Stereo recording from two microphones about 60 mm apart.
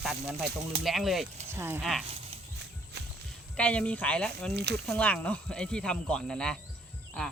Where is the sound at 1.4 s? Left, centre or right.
Right.